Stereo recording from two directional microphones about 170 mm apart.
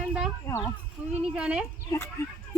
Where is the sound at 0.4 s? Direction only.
15° left (ahead or behind).